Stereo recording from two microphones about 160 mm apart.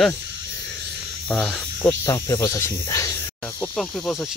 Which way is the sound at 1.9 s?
20° left (ahead or behind).